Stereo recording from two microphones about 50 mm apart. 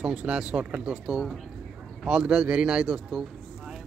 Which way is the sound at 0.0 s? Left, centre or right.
Centre.